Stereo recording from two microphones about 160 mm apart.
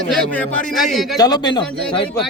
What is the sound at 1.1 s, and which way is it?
Speech, 25° left (ahead or behind).